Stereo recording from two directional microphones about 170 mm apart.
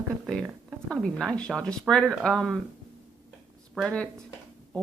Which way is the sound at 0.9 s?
Centre (ahead or behind).